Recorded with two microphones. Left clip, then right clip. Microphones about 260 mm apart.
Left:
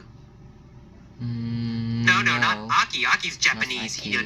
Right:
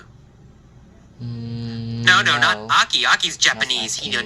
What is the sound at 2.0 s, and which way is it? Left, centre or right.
Speech, right.